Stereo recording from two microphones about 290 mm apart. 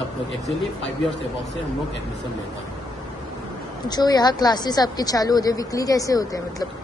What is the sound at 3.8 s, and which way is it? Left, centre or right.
A woman's voice, centre.